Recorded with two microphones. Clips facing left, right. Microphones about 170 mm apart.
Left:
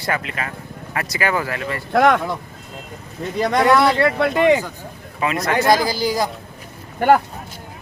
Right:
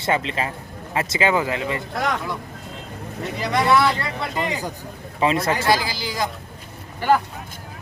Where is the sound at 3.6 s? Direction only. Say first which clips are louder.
Left 4 dB; 70° left (ahead or behind).